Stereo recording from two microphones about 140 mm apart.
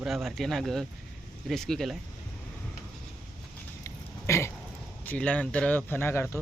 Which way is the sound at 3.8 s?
20° left (ahead or behind).